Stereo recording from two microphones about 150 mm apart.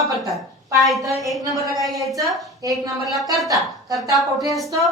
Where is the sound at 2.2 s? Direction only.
Centre (ahead or behind).